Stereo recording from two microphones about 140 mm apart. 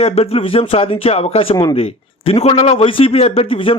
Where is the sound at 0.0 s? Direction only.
45° left (ahead or behind).